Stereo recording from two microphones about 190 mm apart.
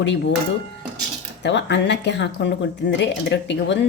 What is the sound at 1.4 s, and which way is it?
Speech, 65° left (ahead or behind).